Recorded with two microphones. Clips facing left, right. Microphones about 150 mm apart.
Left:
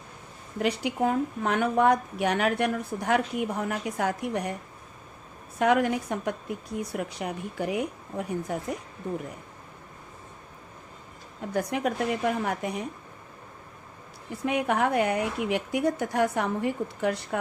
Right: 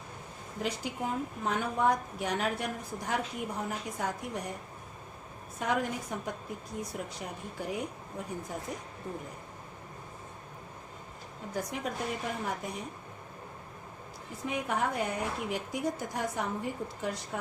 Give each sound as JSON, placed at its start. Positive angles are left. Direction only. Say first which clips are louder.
{"t": 0.6, "sound": "a woman's voice", "louder": "left 9 dB", "side_deg": 70}
{"t": 5.5, "sound": "a woman's voice", "louder": "left 9 dB", "side_deg": 70}
{"t": 11.5, "sound": "a woman's voice", "louder": "left 8 dB", "side_deg": 70}
{"t": 14.4, "sound": "a woman's voice", "louder": "left 7 dB", "side_deg": 70}